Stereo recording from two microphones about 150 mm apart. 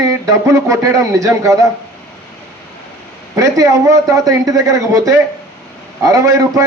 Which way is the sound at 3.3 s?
20° right (ahead or behind).